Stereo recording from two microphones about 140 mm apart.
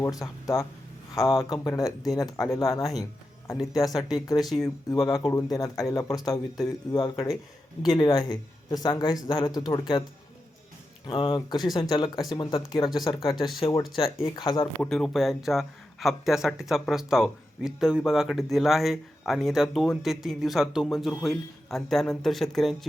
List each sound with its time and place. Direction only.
0.0 s speech: 25° left (ahead or behind)
1.2 s speech: centre (ahead or behind)
1.6 s speech: 25° left (ahead or behind)
4.4 s speech: centre (ahead or behind)
4.9 s speech: 25° left (ahead or behind)
11.0 s speech: 35° left (ahead or behind)
13.3 s speech: centre (ahead or behind)
14.3 s speech: 35° left (ahead or behind)
14.8 s speech: 5° left (ahead or behind)